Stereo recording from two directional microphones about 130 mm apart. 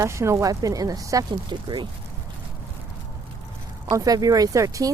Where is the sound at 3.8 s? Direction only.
30° right (ahead or behind).